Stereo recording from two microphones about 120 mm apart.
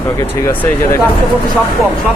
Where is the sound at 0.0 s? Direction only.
20° left (ahead or behind).